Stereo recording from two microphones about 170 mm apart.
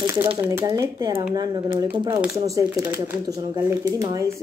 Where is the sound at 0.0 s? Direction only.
15° right (ahead or behind).